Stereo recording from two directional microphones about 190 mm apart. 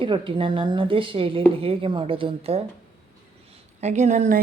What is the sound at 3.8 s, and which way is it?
Speech, 40° right (ahead or behind).